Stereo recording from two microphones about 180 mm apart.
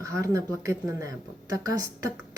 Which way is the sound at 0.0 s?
15° right (ahead or behind).